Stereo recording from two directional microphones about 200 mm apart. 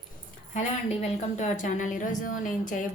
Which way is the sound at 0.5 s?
35° left (ahead or behind).